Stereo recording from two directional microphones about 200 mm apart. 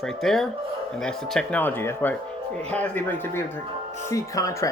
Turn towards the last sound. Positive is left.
turn(degrees=15)  # may be behind; listen again after turning